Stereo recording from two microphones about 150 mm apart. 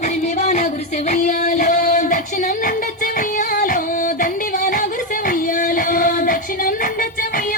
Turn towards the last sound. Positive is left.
turn(degrees=70)  # may be behind; listen again after turning